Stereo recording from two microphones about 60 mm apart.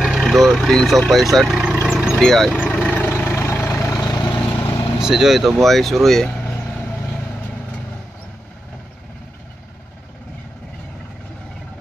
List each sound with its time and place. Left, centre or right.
0.0 s vehicle: centre
0.8 s speech: centre
2.1 s speech: centre
2.6 s vehicle: left
3.3 s vehicle: left
3.8 s vehicle: left
4.6 s vehicle: left
5.0 s speech: centre
7.2 s vehicle: left